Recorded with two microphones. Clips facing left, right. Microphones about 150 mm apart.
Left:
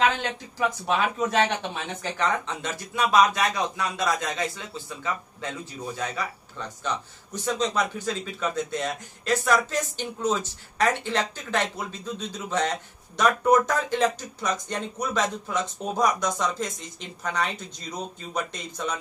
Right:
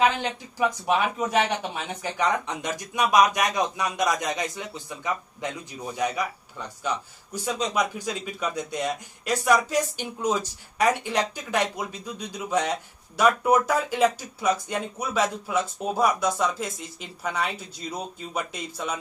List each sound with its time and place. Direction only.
0.0 s a man's voice: 10° right (ahead or behind)